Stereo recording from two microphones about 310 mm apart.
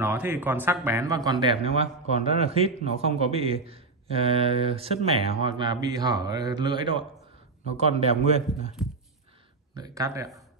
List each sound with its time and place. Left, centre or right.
0.0 s a man's voice: centre
8.8 s a sound: centre
9.8 s speech: centre